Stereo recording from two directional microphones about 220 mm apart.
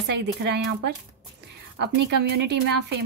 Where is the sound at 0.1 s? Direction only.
50° right (ahead or behind).